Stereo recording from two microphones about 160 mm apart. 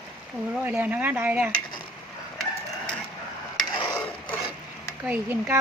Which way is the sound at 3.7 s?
30° left (ahead or behind).